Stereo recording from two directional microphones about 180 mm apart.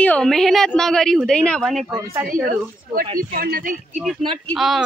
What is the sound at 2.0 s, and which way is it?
Speech, 15° right (ahead or behind).